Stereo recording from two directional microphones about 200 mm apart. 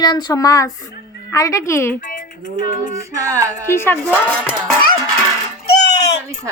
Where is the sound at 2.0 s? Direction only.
45° left (ahead or behind).